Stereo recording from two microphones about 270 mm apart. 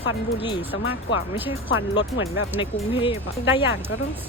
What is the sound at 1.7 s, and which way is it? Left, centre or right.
Speech, left.